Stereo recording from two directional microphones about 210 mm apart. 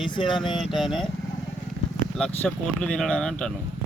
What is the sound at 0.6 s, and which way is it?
Speech, centre (ahead or behind).